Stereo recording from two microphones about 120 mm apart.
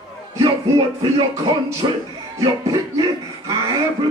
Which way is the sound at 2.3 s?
30° right (ahead or behind).